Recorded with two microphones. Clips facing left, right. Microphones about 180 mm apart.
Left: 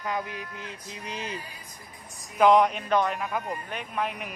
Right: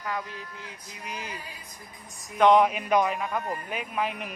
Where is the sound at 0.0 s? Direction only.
20° left (ahead or behind).